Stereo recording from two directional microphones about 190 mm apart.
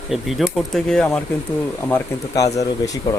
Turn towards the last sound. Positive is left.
turn(degrees=20)  # may be behind; listen again after turning